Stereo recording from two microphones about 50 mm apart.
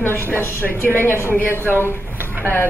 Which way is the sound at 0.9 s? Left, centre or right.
Left.